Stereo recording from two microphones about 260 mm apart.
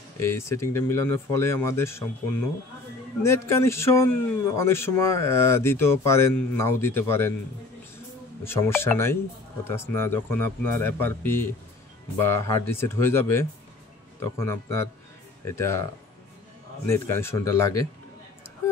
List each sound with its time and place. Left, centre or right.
0.2 s speech: centre
3.2 s speech: centre
8.5 s speech: centre
16.8 s speech: centre